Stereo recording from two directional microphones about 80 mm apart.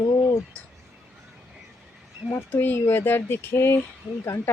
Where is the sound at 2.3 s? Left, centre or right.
Left.